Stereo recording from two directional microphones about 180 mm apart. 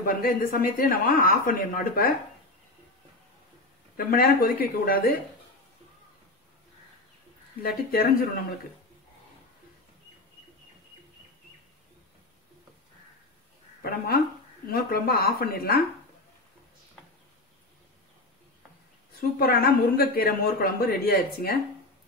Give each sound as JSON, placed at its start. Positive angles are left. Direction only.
{"t": 0.0, "sound": "speech", "side_deg": 55}
{"t": 3.9, "sound": "speech", "side_deg": 55}
{"t": 7.6, "sound": "speech", "side_deg": 55}
{"t": 13.8, "sound": "speech", "side_deg": 60}
{"t": 19.1, "sound": "speech", "side_deg": 55}